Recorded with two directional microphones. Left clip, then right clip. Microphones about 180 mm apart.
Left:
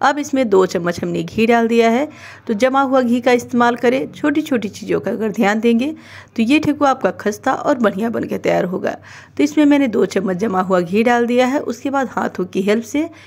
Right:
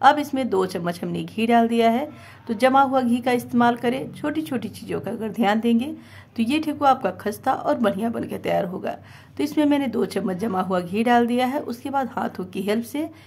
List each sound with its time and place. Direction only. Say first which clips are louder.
0.0 s speech: left 1 dB; 25° left (ahead or behind)